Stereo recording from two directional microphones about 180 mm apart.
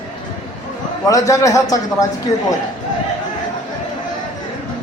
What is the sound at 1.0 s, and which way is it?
A man's voice, 20° left (ahead or behind).